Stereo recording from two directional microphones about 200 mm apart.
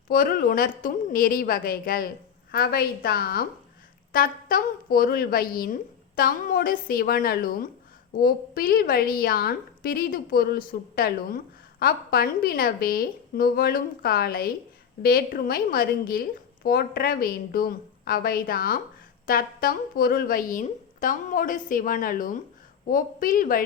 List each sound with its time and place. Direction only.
0.1 s a woman's voice: 45° left (ahead or behind)